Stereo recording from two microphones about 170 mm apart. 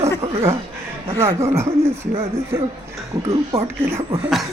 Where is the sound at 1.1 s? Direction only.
15° right (ahead or behind).